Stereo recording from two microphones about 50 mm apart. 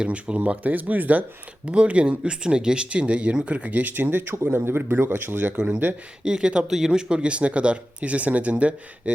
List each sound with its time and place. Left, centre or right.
0.0 s speech: right
6.2 s speech: centre